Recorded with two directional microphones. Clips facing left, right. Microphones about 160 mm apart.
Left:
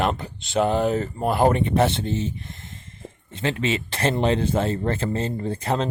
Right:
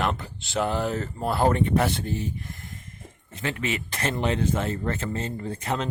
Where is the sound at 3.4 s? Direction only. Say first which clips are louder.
Left 5 dB; 30° left (ahead or behind).